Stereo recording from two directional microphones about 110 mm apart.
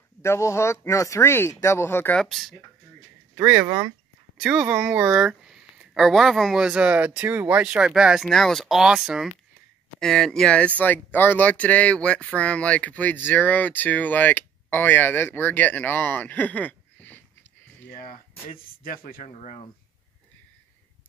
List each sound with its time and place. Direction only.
0.2 s speech: 25° left (ahead or behind)
2.1 s speech: centre (ahead or behind)
3.6 s speech: 20° right (ahead or behind)
4.4 s speech: 5° right (ahead or behind); by 17.5 s 15° left (ahead or behind)
19.2 s speech: 90° left